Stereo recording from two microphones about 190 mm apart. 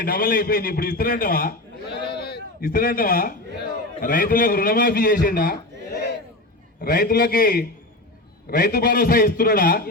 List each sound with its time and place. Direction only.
0.0 s a man's voice: 50° left (ahead or behind)
2.1 s a sound: 55° left (ahead or behind)
4.0 s a man's voice: 50° left (ahead or behind)
6.8 s a man's voice: 50° left (ahead or behind)